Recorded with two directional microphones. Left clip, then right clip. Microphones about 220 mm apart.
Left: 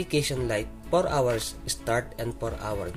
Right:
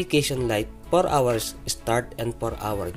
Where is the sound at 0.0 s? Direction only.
20° right (ahead or behind).